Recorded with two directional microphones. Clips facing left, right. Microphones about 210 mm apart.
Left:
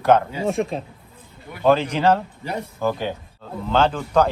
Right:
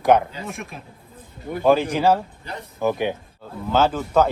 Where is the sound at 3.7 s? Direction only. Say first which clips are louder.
Even; 5° right (ahead or behind).